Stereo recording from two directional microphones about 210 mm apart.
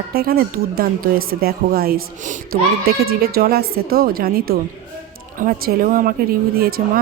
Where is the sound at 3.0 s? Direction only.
45° right (ahead or behind).